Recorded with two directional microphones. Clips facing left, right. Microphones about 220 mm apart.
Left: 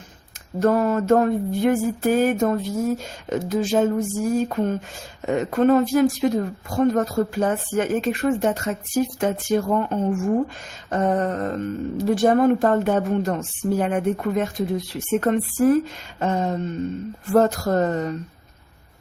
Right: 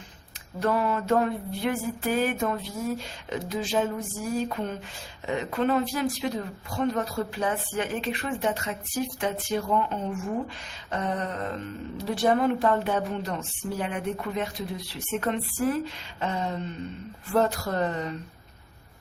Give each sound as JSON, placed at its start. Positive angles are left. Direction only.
{"t": 0.6, "sound": "speech", "side_deg": 45}